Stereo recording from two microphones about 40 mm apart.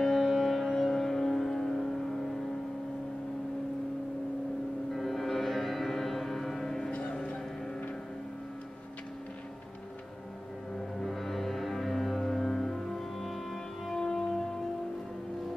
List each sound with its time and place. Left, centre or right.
0.2 s music: centre
4.9 s music: centre
6.9 s music: left
11.0 s music: centre